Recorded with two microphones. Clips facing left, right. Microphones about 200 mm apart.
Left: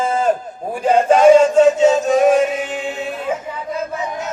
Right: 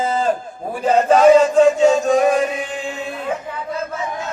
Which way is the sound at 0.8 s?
10° left (ahead or behind).